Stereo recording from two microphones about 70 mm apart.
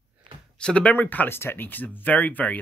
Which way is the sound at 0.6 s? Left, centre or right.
Centre.